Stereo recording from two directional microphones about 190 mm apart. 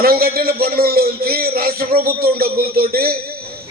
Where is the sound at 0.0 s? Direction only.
50° right (ahead or behind).